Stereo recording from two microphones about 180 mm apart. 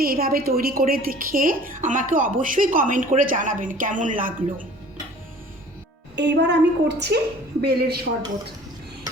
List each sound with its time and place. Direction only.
0.0 s a woman's voice: 55° right (ahead or behind)
6.1 s a woman's voice: 75° right (ahead or behind)